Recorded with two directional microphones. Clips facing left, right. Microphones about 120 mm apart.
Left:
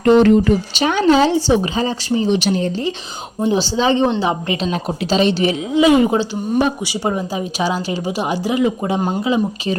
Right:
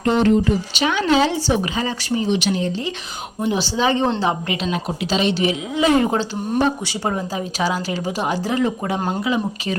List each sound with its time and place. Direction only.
0.0 s speech: 65° left (ahead or behind)
0.8 s speech: 40° left (ahead or behind); by 4.4 s 15° left (ahead or behind)
4.7 s speech: 35° left (ahead or behind)
5.7 s speech: 15° left (ahead or behind)
9.2 s speech: 25° left (ahead or behind)